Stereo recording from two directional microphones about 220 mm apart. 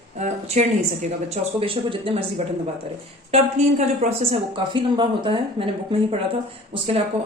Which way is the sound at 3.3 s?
30° right (ahead or behind).